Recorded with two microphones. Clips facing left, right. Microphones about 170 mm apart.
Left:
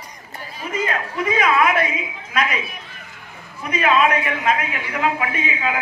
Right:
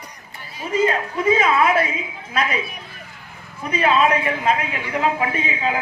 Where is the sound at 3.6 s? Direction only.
30° right (ahead or behind).